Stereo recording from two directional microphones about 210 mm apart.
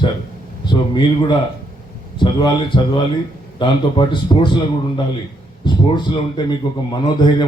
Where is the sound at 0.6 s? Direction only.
20° left (ahead or behind).